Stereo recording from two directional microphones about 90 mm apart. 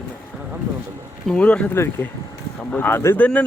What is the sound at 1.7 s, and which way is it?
Speech, 25° left (ahead or behind).